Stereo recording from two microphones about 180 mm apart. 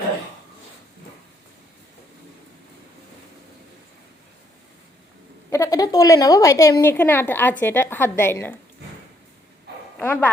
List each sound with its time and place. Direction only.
5.5 s a woman's voice: 20° left (ahead or behind)
10.0 s a woman's voice: 10° left (ahead or behind)